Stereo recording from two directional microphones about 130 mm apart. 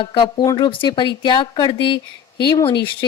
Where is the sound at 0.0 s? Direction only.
40° left (ahead or behind).